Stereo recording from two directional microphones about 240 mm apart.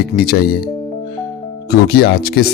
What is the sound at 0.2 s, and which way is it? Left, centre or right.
Speech, left.